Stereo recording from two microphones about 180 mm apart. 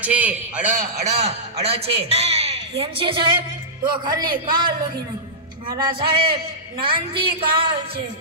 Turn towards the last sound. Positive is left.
turn(degrees=-30)  # may be behind; listen again after turning